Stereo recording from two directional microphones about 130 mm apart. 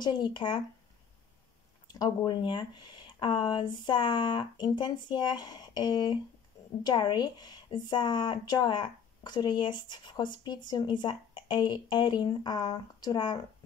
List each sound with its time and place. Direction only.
0.0 s speech: 35° left (ahead or behind)
1.9 s speech: 35° left (ahead or behind)